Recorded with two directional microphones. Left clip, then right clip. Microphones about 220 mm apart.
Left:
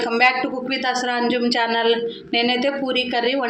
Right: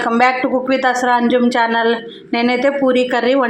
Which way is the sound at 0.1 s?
20° right (ahead or behind).